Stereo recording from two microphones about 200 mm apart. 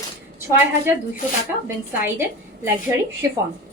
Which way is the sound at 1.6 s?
10° right (ahead or behind).